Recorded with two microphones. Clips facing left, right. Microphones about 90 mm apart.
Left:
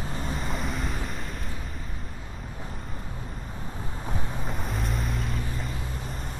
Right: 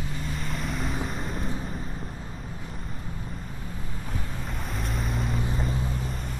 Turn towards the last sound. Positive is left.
turn(degrees=0)  # may be behind; listen again after turning